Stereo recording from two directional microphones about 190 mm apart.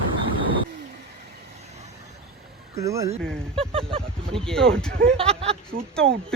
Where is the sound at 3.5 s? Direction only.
30° right (ahead or behind).